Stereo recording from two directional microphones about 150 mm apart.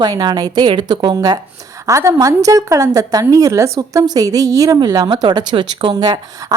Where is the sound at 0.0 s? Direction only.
30° right (ahead or behind).